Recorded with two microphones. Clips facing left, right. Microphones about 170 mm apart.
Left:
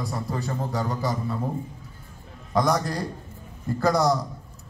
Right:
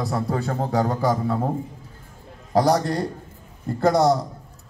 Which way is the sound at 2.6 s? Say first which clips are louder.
Right 4 dB; 35° right (ahead or behind).